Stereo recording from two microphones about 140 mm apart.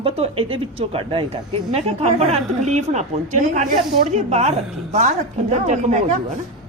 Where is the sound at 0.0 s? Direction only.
40° right (ahead or behind).